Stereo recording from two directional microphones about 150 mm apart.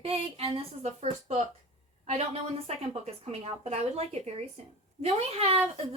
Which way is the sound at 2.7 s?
45° right (ahead or behind).